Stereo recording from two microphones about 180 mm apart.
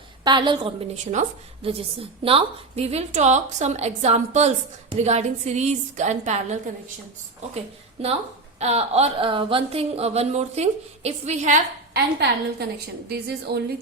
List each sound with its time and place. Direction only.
0.3 s a woman's voice: 25° right (ahead or behind); by 6.6 s 40° right (ahead or behind)
8.0 s a woman's voice: 35° right (ahead or behind)
11.9 s a woman's voice: 60° right (ahead or behind)